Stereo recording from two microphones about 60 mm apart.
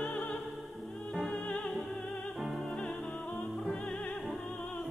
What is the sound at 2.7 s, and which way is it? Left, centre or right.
Music, centre.